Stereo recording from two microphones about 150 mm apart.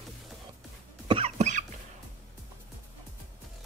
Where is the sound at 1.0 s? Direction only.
40° right (ahead or behind).